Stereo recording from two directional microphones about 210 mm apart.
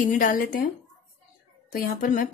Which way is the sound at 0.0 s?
40° left (ahead or behind).